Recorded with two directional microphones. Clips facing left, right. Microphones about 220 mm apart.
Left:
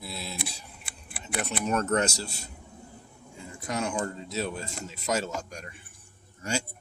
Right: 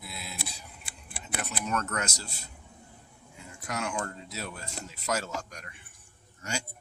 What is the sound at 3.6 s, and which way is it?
Speech, 25° left (ahead or behind).